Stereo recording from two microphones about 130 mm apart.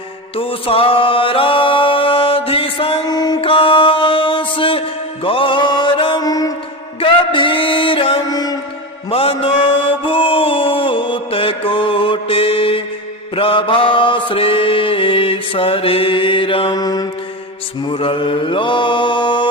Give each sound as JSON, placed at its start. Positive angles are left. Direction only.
{"t": 0.3, "sound": "mantra", "side_deg": 45}
{"t": 3.1, "sound": "mantra", "side_deg": 30}
{"t": 6.2, "sound": "music", "side_deg": 30}
{"t": 7.0, "sound": "music", "side_deg": 40}
{"t": 8.3, "sound": "mantra", "side_deg": 30}
{"t": 9.0, "sound": "mantra", "side_deg": 45}
{"t": 16.7, "sound": "mantra", "side_deg": 30}
{"t": 17.8, "sound": "mantra", "side_deg": 45}